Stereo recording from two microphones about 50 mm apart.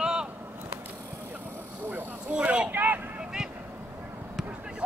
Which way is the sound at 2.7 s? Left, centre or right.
Right.